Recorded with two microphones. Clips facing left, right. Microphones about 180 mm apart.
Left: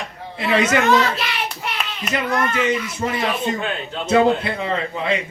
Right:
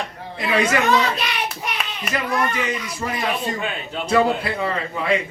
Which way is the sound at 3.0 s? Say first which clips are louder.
Left 1 dB; 30° left (ahead or behind).